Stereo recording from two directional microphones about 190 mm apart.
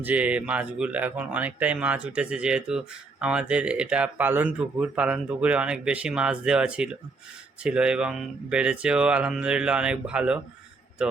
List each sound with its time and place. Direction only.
0.0 s speech: 5° right (ahead or behind)